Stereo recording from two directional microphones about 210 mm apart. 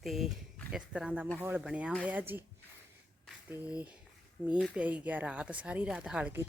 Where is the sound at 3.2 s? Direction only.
5° right (ahead or behind).